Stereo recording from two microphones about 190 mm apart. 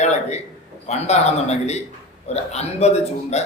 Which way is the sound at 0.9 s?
35° left (ahead or behind).